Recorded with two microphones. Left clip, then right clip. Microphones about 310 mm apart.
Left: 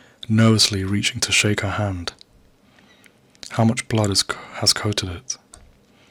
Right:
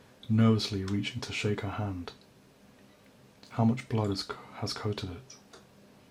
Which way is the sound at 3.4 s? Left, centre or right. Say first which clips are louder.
Left 10 dB; left.